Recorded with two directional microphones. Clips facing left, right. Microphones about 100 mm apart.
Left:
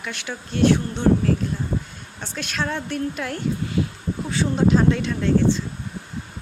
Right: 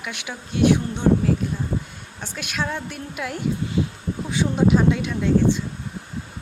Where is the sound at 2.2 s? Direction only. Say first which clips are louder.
Left 1 dB; 10° right (ahead or behind).